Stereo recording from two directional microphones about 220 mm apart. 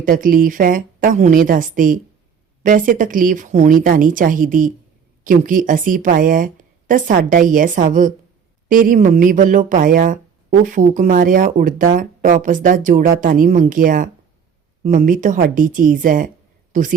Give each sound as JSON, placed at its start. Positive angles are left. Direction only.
{"t": 0.0, "sound": "speech", "side_deg": -40}